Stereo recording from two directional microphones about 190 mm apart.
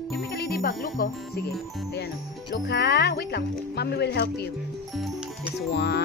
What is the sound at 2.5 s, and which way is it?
Speech, 60° left (ahead or behind).